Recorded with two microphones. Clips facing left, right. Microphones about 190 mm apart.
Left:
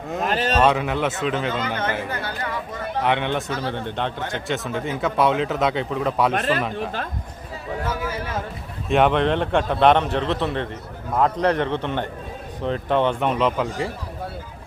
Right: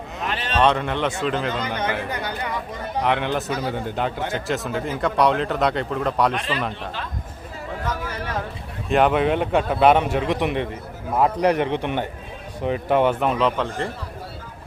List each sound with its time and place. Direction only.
0.1 s a sound: 45° left (ahead or behind)
0.6 s speech: 5° left (ahead or behind)
2.0 s a man's voice: 15° right (ahead or behind)
3.0 s speech: centre (ahead or behind)
6.3 s speech: 50° left (ahead or behind)
8.9 s a man's voice: centre (ahead or behind)